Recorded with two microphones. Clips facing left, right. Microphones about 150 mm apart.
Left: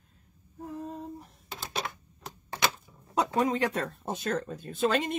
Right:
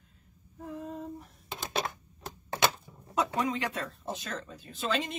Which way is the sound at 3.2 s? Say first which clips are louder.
Left 4 dB; 40° left (ahead or behind).